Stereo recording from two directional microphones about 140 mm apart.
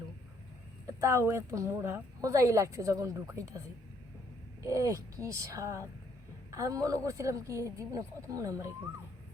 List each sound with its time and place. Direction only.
1.0 s a woman's voice: 20° right (ahead or behind)
4.6 s a woman's voice: 20° right (ahead or behind)